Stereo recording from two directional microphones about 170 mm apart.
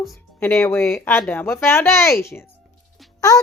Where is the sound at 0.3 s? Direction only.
10° left (ahead or behind).